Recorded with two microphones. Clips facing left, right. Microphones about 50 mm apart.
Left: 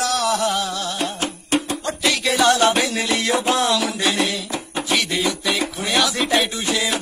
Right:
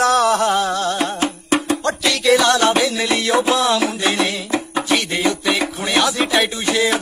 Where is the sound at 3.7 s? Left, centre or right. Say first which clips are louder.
Right 3 dB; right.